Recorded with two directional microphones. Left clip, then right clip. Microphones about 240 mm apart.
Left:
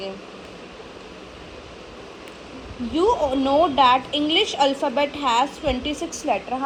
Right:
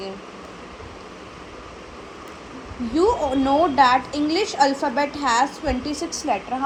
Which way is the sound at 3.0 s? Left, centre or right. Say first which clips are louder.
Even; left.